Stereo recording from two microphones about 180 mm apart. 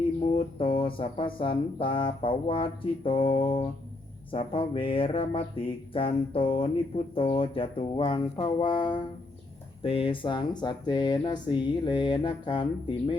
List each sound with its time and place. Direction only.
0.3 s speech: 30° left (ahead or behind)
4.3 s a sound: 30° left (ahead or behind)
5.9 s speech: 30° left (ahead or behind)